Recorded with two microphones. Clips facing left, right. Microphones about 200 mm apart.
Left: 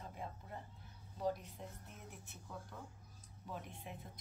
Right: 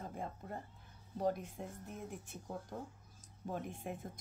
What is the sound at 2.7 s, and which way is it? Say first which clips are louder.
Speech: right 7 dB; 35° right (ahead or behind).